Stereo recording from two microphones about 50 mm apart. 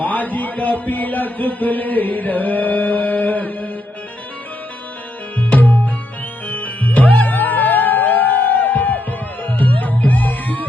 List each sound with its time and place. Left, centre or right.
0.0 s a man's voice: left
5.4 s music: left